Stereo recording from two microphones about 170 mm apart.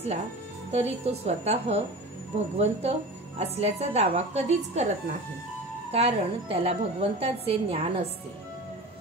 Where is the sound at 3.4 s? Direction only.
40° right (ahead or behind).